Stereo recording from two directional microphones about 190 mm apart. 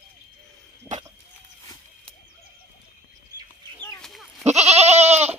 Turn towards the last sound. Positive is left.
turn(degrees=-35)  # may be behind; listen again after turning